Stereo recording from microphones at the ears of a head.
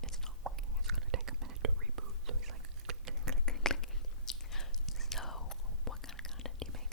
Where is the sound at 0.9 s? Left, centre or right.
Right.